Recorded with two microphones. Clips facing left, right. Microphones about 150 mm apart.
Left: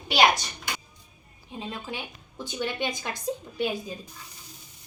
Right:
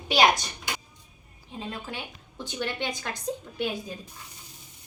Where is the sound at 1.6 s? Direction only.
15° left (ahead or behind).